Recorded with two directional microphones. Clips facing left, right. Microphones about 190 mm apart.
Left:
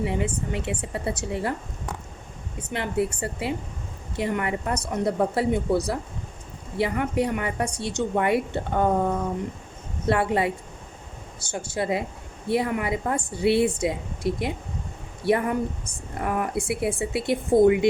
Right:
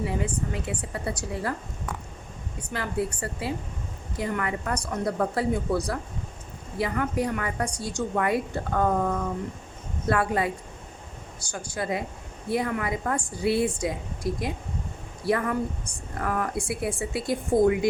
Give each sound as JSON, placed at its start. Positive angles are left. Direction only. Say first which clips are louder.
{"t": 0.0, "sound": "a woman's voice", "louder": "left 2 dB", "side_deg": 25}
{"t": 2.6, "sound": "a woman's voice", "louder": "left 3 dB", "side_deg": 25}
{"t": 11.5, "sound": "a woman's voice", "louder": "left 3 dB", "side_deg": 25}